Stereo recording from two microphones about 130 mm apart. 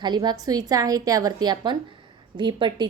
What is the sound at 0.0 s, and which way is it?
A woman's voice, 35° right (ahead or behind).